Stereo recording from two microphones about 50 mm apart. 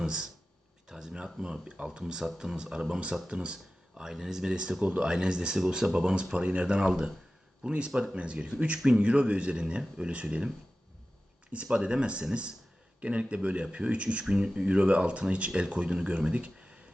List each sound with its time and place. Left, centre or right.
0.0 s speech: centre
0.9 s a sound: centre
1.6 s speech: right
11.5 s speech: centre